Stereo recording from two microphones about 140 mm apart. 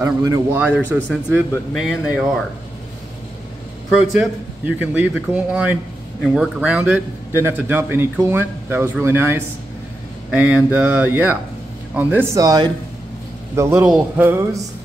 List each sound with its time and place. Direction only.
0.0 s speech: 25° right (ahead or behind)
0.9 s a man's voice: 10° right (ahead or behind)
4.2 s a man's voice: 10° right (ahead or behind)
12.4 s speech: 30° right (ahead or behind)
13.6 s a man's voice: 20° right (ahead or behind)
13.8 s speech: 5° right (ahead or behind)
14.2 s a man's voice: 15° right (ahead or behind)